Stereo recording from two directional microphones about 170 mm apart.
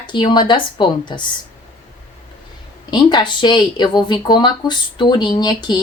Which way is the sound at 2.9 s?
25° left (ahead or behind).